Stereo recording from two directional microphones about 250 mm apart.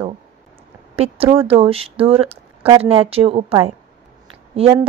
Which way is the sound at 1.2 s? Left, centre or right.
Right.